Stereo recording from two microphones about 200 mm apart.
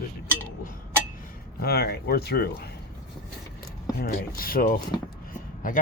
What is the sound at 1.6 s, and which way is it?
Speech, 50° left (ahead or behind).